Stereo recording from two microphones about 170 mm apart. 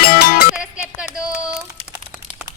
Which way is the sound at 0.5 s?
5° right (ahead or behind).